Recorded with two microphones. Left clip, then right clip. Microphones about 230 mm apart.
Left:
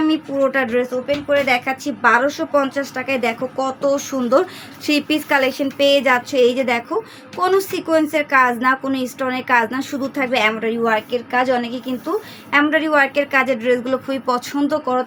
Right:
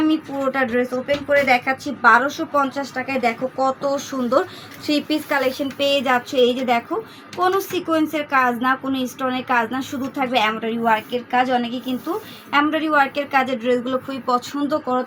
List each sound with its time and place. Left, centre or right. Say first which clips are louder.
0.0 s speech: left 3 dB; left
12.5 s speech: left 3 dB; left